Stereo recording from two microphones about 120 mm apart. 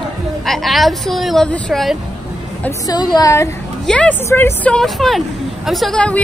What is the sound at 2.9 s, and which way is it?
Speech, 35° left (ahead or behind).